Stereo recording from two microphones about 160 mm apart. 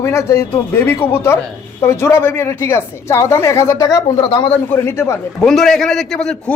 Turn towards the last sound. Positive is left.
turn(degrees=5)  # may be behind; listen again after turning